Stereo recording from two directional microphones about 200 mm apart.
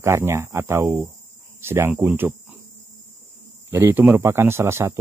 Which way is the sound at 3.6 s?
10° right (ahead or behind).